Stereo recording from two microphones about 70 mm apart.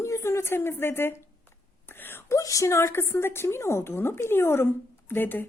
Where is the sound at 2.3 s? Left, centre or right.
Left.